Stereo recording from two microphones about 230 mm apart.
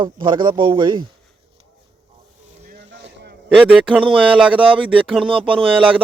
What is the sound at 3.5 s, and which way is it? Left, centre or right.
Speech, centre.